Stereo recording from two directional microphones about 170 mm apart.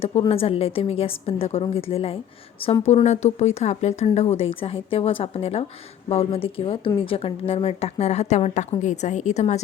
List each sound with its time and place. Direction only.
0.0 s a woman's voice: 35° left (ahead or behind)